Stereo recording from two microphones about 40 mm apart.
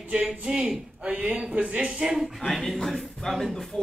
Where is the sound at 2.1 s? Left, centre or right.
Centre.